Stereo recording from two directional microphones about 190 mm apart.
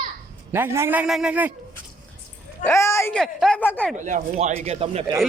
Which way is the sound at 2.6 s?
15° left (ahead or behind).